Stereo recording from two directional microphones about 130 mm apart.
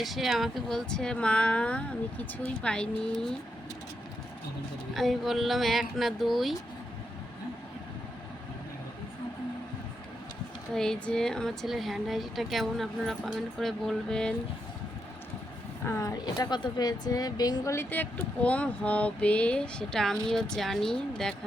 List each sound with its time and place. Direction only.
0.0 s a woman's voice: centre (ahead or behind)
4.9 s speech: centre (ahead or behind)
10.8 s speech: 5° left (ahead or behind)
16.0 s a woman's voice: 25° left (ahead or behind); by 21.3 s 5° left (ahead or behind)